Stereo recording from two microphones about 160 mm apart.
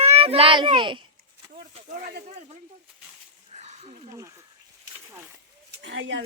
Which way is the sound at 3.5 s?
40° right (ahead or behind).